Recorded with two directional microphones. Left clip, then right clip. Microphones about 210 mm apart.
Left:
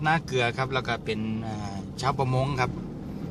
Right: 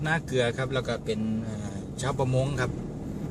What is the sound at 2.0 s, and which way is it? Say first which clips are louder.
Speech: left 2 dB; 30° left (ahead or behind).